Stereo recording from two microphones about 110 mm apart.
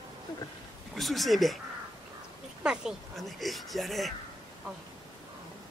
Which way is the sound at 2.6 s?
5° right (ahead or behind).